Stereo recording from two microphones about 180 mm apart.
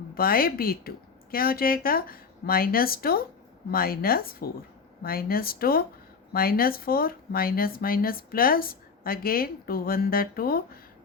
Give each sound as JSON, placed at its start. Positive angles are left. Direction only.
{"t": 0.1, "sound": "speech", "side_deg": 55}